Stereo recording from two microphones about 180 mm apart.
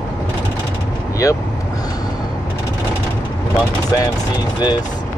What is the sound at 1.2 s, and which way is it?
Speech, 15° left (ahead or behind).